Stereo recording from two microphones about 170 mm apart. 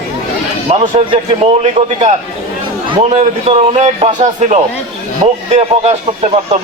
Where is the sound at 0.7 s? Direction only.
35° right (ahead or behind).